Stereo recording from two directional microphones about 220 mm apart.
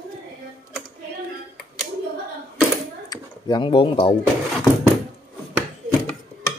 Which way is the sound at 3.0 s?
20° left (ahead or behind).